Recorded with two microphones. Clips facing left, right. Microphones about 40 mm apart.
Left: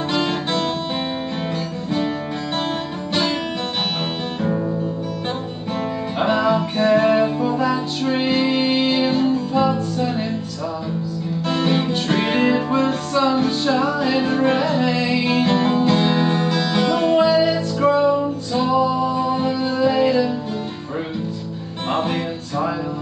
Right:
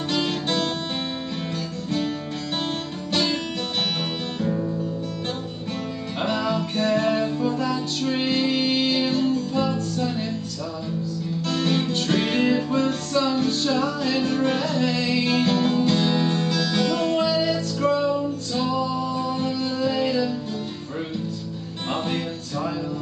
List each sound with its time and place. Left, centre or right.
0.1 s music: centre
6.1 s music: centre
11.4 s music: centre
21.9 s music: centre